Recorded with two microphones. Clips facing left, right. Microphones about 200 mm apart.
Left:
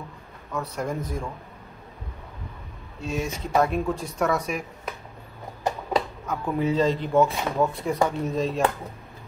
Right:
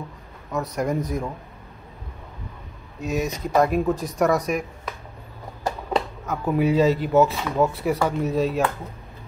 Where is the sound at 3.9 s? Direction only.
30° left (ahead or behind).